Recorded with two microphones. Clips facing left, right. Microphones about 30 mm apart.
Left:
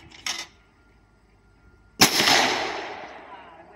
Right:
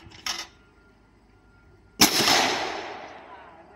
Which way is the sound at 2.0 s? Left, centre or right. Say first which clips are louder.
Left 2 dB; centre.